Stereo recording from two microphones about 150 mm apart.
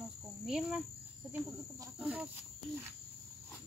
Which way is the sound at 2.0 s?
5° right (ahead or behind).